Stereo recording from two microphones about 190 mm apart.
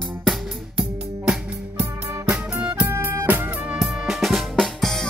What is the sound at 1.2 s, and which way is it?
Music, 5° right (ahead or behind).